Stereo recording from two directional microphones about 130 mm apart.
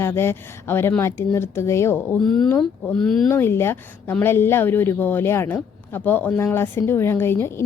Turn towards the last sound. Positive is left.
turn(degrees=20)  # may be behind; listen again after turning